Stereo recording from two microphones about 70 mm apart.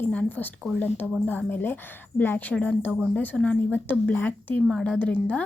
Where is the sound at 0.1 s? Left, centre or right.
Left.